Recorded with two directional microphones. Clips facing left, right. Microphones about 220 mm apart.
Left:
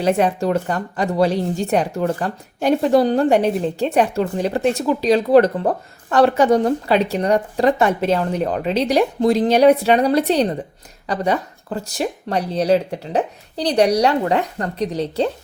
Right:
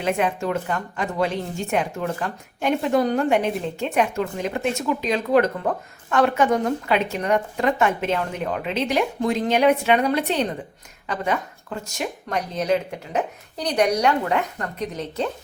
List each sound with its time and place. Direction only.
0.0 s speech: 35° left (ahead or behind)